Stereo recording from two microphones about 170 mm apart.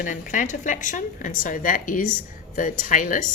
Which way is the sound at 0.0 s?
50° left (ahead or behind).